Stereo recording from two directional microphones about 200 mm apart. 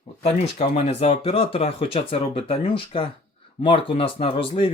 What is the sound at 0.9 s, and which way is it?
Speech, 30° left (ahead or behind).